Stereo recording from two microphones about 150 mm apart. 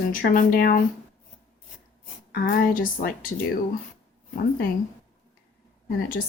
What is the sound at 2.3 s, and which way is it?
Speech, 75° left (ahead or behind).